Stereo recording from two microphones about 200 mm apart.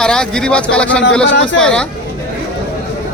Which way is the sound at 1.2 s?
65° left (ahead or behind).